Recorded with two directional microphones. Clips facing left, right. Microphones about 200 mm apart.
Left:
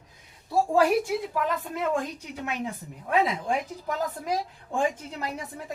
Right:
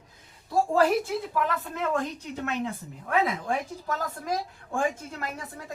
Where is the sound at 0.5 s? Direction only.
10° left (ahead or behind).